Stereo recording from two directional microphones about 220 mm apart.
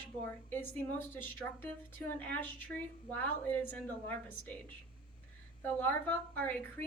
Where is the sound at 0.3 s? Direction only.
10° left (ahead or behind).